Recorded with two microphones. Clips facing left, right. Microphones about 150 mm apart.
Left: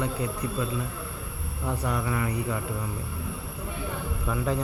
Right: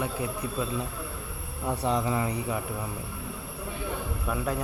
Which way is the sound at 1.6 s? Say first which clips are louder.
Right 2 dB; 20° right (ahead or behind).